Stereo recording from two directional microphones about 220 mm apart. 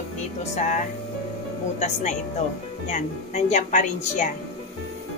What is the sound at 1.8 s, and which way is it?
A woman's voice, 30° left (ahead or behind).